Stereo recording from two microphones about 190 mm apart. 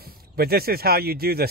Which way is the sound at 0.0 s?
55° right (ahead or behind).